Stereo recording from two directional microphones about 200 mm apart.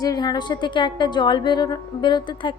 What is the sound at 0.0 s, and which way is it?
A woman's voice, 20° left (ahead or behind).